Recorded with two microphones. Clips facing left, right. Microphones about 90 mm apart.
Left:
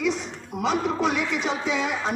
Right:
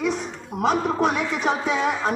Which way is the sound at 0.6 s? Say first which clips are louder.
Right 3 dB; 45° right (ahead or behind).